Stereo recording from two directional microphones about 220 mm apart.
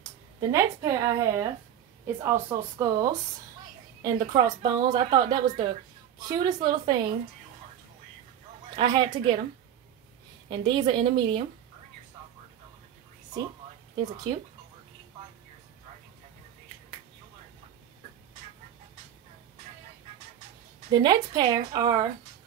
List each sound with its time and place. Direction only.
0.4 s a woman's voice: 15° right (ahead or behind)
8.7 s a woman's voice: 20° right (ahead or behind)
10.5 s a woman's voice: 20° right (ahead or behind)
20.9 s a woman's voice: 20° right (ahead or behind)